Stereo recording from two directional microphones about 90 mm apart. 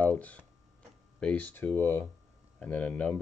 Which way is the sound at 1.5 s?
25° left (ahead or behind).